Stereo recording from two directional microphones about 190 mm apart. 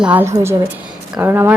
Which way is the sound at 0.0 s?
10° right (ahead or behind).